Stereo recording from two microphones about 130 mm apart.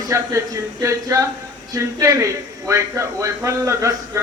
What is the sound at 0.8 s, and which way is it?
A man's voice, 25° right (ahead or behind).